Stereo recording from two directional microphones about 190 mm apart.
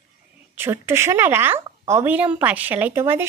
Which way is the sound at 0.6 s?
15° right (ahead or behind).